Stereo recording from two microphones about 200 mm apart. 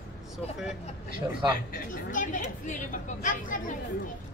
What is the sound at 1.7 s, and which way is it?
Speech, 40° left (ahead or behind).